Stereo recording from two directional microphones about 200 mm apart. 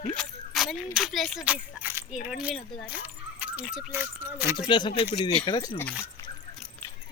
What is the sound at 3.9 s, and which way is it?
Speech, 10° right (ahead or behind).